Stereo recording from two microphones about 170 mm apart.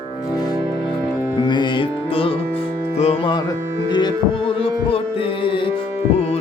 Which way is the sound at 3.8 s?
25° left (ahead or behind).